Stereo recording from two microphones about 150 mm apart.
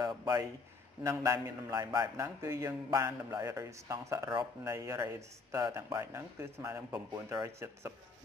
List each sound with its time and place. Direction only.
0.0 s a man's voice: 25° right (ahead or behind)